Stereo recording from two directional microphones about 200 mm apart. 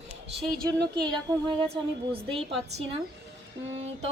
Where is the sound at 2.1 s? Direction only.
30° right (ahead or behind).